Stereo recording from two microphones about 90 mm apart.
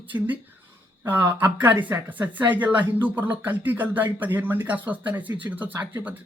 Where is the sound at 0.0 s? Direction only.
20° right (ahead or behind).